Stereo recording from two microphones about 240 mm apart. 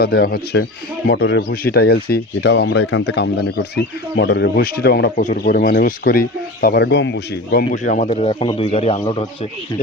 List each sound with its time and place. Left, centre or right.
0.0 s speech: left
7.7 s a man's voice: left